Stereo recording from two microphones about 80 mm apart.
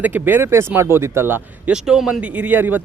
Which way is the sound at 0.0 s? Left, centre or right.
Right.